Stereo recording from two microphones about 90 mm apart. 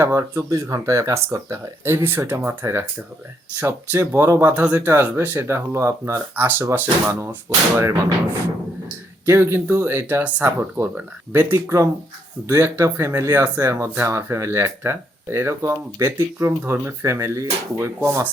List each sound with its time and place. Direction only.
0.0 s speech: 30° right (ahead or behind)